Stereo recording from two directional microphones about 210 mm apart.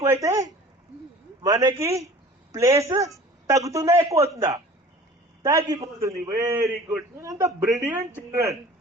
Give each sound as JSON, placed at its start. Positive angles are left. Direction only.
{"t": 0.0, "sound": "a man's voice", "side_deg": -15}